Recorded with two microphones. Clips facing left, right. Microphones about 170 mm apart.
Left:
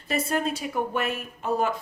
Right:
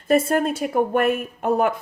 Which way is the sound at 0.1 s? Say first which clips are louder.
Right 8 dB; 50° right (ahead or behind).